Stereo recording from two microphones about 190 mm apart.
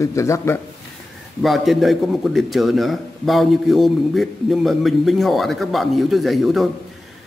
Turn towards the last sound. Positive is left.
turn(degrees=0)  # may be behind; listen again after turning